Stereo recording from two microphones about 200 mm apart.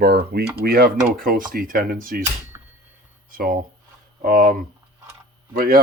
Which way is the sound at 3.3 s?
45° right (ahead or behind).